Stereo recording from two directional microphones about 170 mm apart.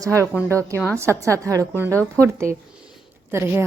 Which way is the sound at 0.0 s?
15° right (ahead or behind).